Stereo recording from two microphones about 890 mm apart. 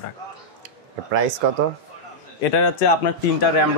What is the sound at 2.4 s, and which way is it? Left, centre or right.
Speech, left.